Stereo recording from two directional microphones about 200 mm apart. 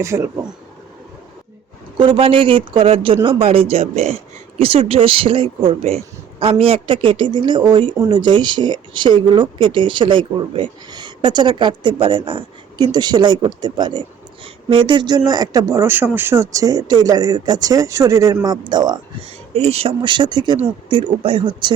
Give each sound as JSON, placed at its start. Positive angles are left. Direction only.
{"t": 0.0, "sound": "speech", "side_deg": -15}
{"t": 2.0, "sound": "speech", "side_deg": -25}